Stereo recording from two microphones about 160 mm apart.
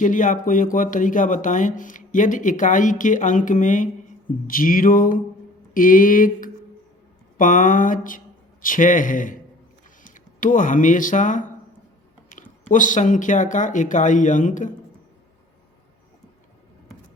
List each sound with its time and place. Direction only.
0.0 s speech: 55° left (ahead or behind)
4.4 s a sound: 60° left (ahead or behind)
10.0 s speech: 55° left (ahead or behind)